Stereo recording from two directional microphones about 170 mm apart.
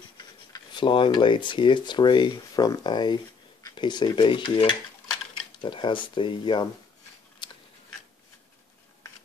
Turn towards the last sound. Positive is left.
turn(degrees=25)  # may be behind; listen again after turning